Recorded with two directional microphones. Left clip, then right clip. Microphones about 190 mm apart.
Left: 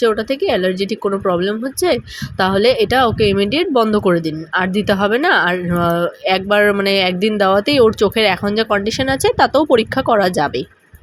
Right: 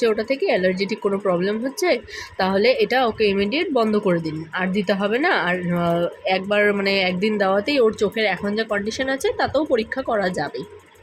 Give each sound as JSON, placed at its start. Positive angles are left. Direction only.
{"t": 0.0, "sound": "speech", "side_deg": 20}